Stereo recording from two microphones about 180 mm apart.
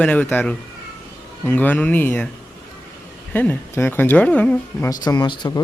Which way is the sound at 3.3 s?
10° left (ahead or behind).